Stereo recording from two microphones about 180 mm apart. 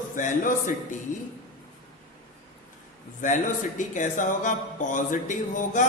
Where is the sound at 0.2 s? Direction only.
45° left (ahead or behind).